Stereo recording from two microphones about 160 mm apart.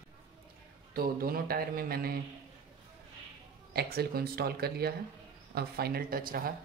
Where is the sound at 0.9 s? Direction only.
70° right (ahead or behind).